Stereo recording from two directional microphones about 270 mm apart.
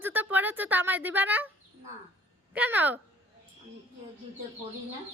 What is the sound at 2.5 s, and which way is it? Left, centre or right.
Speech, centre.